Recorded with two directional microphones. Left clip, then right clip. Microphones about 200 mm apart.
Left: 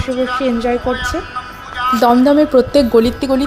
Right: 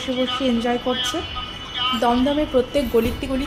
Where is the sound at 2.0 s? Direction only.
40° left (ahead or behind).